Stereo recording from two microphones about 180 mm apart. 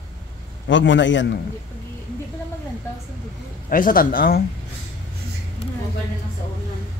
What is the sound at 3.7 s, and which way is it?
Speech, 50° left (ahead or behind).